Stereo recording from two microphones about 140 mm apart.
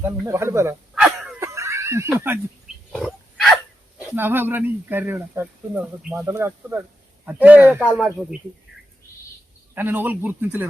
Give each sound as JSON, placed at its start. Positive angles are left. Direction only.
{"t": 0.3, "sound": "speech", "side_deg": -20}
{"t": 1.4, "sound": "snicker", "side_deg": -20}
{"t": 2.9, "sound": "wild animals", "side_deg": 0}
{"t": 4.0, "sound": "speech", "side_deg": -15}
{"t": 6.0, "sound": "speech", "side_deg": 0}
{"t": 6.2, "sound": "speech", "side_deg": -20}
{"t": 9.7, "sound": "speech", "side_deg": -15}